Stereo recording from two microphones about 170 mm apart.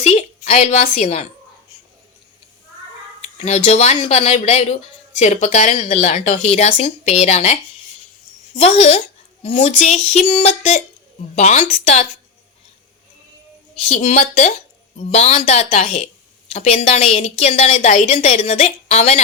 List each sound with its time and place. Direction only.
0.0 s a woman's voice: 40° left (ahead or behind)
3.3 s a woman's voice: 40° left (ahead or behind)
13.8 s a woman's voice: 45° left (ahead or behind)